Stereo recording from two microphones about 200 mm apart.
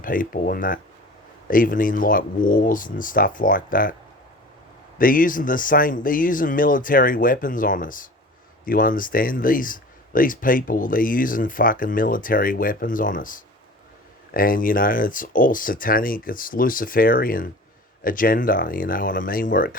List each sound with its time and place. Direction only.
0.0 s speech: 45° left (ahead or behind)
4.9 s speech: 45° left (ahead or behind)